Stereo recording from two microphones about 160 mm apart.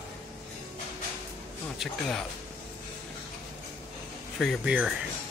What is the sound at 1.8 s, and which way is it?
Speech, 5° left (ahead or behind).